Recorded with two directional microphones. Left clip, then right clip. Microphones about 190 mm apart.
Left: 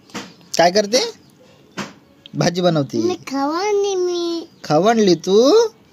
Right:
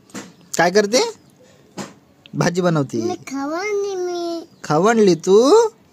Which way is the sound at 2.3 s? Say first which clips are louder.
Left 1 dB; 45° right (ahead or behind).